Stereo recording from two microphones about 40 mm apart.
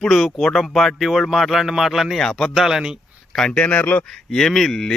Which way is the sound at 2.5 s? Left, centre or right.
Centre.